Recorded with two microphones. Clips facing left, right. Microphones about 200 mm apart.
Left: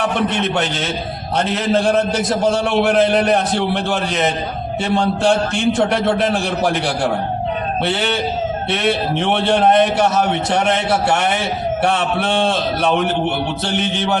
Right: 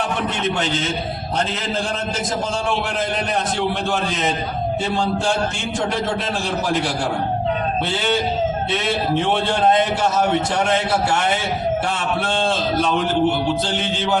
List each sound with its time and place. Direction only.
0.0 s a man's voice: 65° left (ahead or behind)
7.9 s a sound: 65° left (ahead or behind)
8.7 s a man's voice: 65° left (ahead or behind)